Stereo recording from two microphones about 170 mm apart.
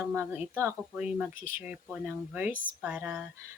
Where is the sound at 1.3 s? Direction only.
50° left (ahead or behind).